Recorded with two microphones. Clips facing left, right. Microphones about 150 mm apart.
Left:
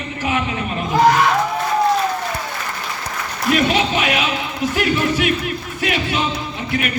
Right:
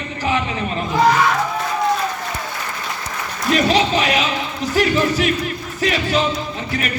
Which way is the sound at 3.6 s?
35° right (ahead or behind).